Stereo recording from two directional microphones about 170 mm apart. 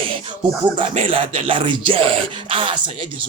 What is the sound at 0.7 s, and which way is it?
Speech, 35° right (ahead or behind).